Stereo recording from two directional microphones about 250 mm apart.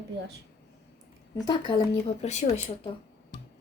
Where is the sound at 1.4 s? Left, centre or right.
Centre.